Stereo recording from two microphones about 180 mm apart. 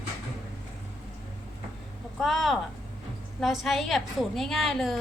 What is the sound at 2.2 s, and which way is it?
A woman's voice, centre (ahead or behind).